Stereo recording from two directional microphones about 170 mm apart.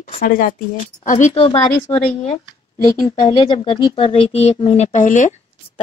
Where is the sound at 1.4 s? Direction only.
30° left (ahead or behind).